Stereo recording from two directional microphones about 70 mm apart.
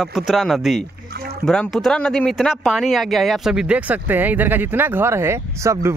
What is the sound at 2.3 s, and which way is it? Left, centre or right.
Speech, centre.